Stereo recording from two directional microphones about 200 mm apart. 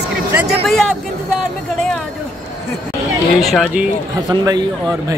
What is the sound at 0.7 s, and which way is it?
Speech, centre (ahead or behind).